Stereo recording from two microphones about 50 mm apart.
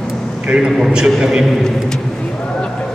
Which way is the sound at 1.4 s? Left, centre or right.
Centre.